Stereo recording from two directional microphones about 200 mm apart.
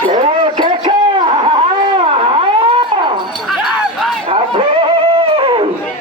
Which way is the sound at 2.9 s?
25° right (ahead or behind).